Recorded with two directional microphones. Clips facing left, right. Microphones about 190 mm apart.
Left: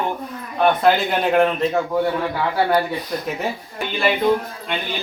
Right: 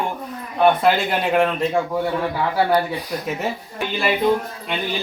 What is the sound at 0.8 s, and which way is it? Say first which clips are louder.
Speech: left 1 dB; centre (ahead or behind).